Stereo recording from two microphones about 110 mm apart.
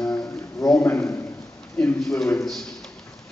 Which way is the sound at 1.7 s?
15° left (ahead or behind).